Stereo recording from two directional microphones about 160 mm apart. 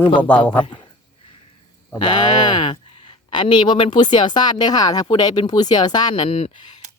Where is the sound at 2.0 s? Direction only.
30° left (ahead or behind).